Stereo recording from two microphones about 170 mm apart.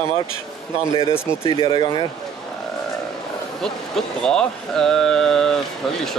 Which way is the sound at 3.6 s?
5° left (ahead or behind).